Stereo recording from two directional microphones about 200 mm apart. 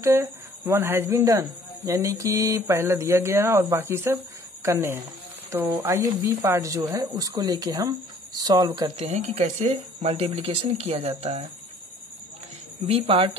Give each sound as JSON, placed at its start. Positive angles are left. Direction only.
{"t": 0.0, "sound": "speech", "side_deg": -15}
{"t": 12.8, "sound": "speech", "side_deg": -30}